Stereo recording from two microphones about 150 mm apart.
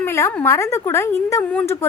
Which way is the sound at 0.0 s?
15° left (ahead or behind).